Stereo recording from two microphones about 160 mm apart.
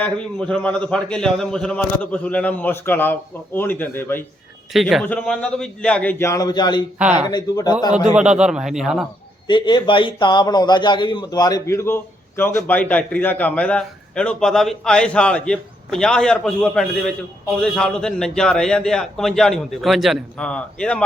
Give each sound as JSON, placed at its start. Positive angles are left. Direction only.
{"t": 0.0, "sound": "a man's voice", "side_deg": 5}
{"t": 4.7, "sound": "a man's voice", "side_deg": 0}
{"t": 8.1, "sound": "a man's voice", "side_deg": -5}
{"t": 9.5, "sound": "a man's voice", "side_deg": 30}